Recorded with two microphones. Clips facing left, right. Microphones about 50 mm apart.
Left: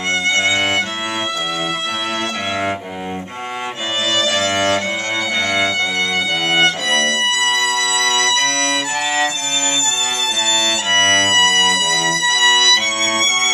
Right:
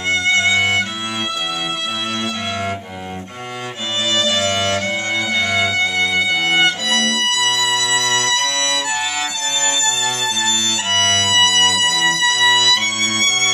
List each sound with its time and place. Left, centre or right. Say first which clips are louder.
0.4 s violin: right 1 dB; left
4.1 s music: even; left
5.8 s violin: right 1 dB; centre
7.0 s violin: left 1 dB; centre
7.5 s music: left 1 dB; centre
8.5 s violin: left 1 dB; left
10.4 s violin: left 2 dB; left
11.5 s music: left 1 dB; centre
12.0 s music: even; centre
13.0 s music: left 1 dB; left